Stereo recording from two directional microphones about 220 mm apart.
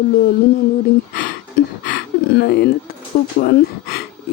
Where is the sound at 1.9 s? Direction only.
45° left (ahead or behind).